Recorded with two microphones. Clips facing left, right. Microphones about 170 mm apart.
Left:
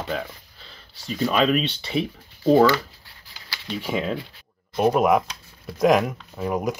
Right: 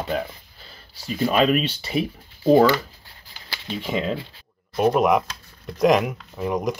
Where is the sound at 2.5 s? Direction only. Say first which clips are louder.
Right 1 dB; 15° right (ahead or behind).